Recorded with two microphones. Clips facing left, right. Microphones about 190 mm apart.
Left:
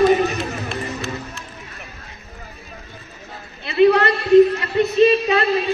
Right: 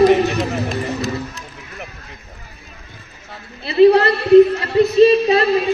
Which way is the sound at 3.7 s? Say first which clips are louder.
Right 4 dB; 30° right (ahead or behind).